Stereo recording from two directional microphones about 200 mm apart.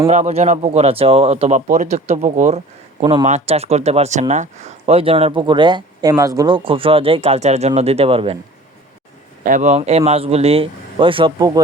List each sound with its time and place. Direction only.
0.1 s speech: 35° right (ahead or behind)
9.4 s speech: 40° right (ahead or behind); by 11.6 s 20° right (ahead or behind)